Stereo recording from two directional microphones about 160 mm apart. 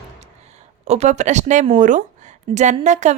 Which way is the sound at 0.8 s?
45° right (ahead or behind).